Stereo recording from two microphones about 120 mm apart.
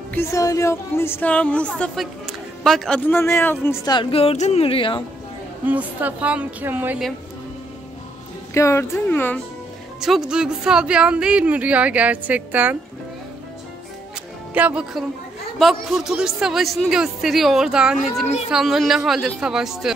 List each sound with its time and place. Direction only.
0.1 s a woman's voice: 25° left (ahead or behind)
2.2 s music: centre (ahead or behind)
3.1 s speech: 20° left (ahead or behind)
3.8 s speech: 35° left (ahead or behind)
4.1 s speech: 55° left (ahead or behind)
5.7 s speech: 15° right (ahead or behind)
8.5 s speech: 25° left (ahead or behind)
9.9 s speech: 5° right (ahead or behind)
14.5 s speech: 10° right (ahead or behind)